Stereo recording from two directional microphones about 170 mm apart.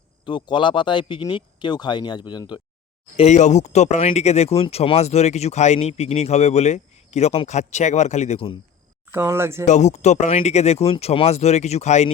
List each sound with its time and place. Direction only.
0.3 s speech: 25° left (ahead or behind)
3.2 s speech: 40° left (ahead or behind)
9.1 s speech: 15° right (ahead or behind)
9.6 s speech: 45° left (ahead or behind)